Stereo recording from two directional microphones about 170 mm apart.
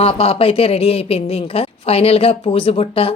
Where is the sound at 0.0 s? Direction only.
35° left (ahead or behind).